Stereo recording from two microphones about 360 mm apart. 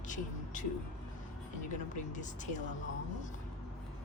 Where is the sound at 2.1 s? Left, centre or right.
Left.